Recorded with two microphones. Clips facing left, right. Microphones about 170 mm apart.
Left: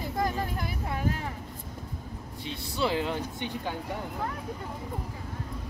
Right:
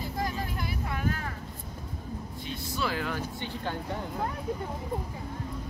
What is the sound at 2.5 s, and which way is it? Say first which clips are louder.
Speech: left 3 dB; 25° left (ahead or behind).